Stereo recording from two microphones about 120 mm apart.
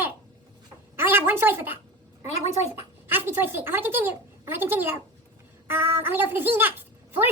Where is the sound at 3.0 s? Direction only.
20° right (ahead or behind).